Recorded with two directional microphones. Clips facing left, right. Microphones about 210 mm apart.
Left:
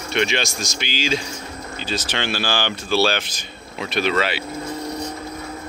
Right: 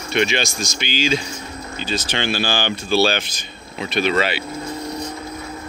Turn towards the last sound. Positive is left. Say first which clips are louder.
# right 2 dB
turn(degrees=0)  # may be behind; listen again after turning